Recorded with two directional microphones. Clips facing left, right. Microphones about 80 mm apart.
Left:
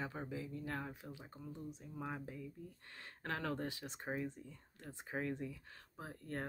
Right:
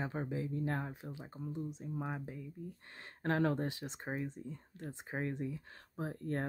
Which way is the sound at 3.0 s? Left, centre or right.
Right.